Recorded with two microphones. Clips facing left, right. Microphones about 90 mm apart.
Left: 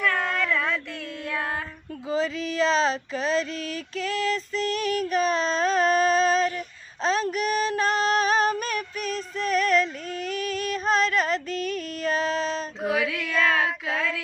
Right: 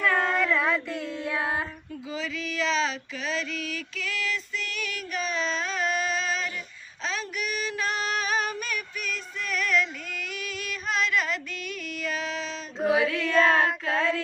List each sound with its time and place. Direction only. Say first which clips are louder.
0.0 s child singing: right 1 dB; 10° right (ahead or behind)
2.0 s child singing: left 7 dB; 40° left (ahead or behind)
7.0 s female singing: left 8 dB; 40° left (ahead or behind)
13.1 s child singing: right 3 dB; 5° left (ahead or behind)
13.3 s child singing: right 2 dB; 25° right (ahead or behind)
13.7 s child singing: right 1 dB; 5° left (ahead or behind)